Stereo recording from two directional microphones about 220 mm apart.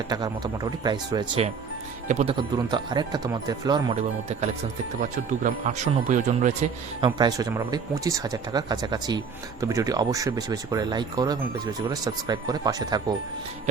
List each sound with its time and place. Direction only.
0.1 s speech: 20° right (ahead or behind)
2.6 s speech: 20° right (ahead or behind)
7.0 s speech: 20° right (ahead or behind)